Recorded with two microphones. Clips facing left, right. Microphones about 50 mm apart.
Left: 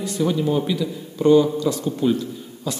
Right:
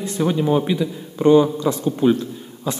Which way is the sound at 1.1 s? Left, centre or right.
Right.